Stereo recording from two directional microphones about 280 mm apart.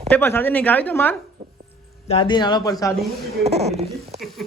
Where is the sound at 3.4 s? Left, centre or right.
Right.